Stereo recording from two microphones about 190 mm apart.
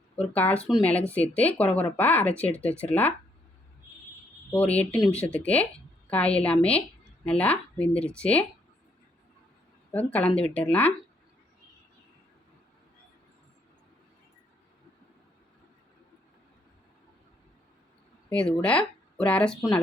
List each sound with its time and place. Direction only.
0.2 s speech: 5° left (ahead or behind)
4.5 s speech: 10° left (ahead or behind)
9.9 s speech: 10° left (ahead or behind)
18.3 s speech: 5° left (ahead or behind)